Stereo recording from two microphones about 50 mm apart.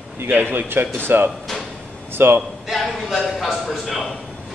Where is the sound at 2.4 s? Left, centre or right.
Centre.